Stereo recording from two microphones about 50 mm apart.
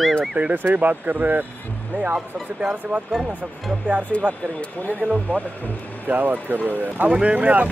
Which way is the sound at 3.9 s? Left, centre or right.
Right.